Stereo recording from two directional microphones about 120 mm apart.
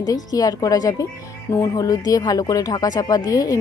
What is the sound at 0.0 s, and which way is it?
Speech, 30° left (ahead or behind).